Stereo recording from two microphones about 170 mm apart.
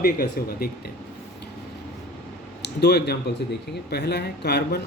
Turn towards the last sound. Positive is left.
turn(degrees=75)  # may be behind; listen again after turning